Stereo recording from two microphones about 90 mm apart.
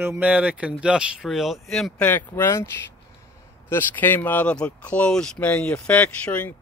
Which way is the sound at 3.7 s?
20° left (ahead or behind).